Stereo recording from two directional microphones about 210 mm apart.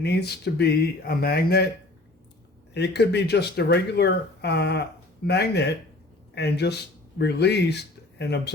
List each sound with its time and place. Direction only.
0.0 s speech: 50° left (ahead or behind)
2.7 s speech: 55° left (ahead or behind)